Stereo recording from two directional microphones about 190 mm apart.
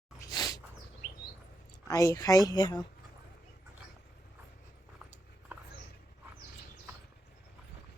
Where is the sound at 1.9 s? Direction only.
15° left (ahead or behind).